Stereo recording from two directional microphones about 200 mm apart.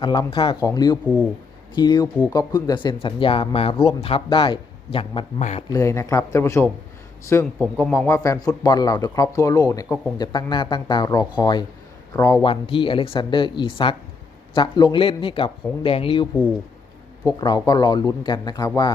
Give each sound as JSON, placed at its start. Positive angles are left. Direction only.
{"t": 0.0, "sound": "speech", "side_deg": 25}
{"t": 5.6, "sound": "a man's voice", "side_deg": 15}
{"t": 17.2, "sound": "speech", "side_deg": 20}